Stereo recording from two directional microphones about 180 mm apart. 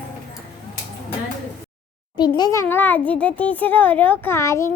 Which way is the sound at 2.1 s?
25° left (ahead or behind).